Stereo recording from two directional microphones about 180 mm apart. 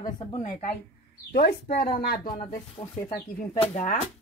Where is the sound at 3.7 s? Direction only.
40° left (ahead or behind).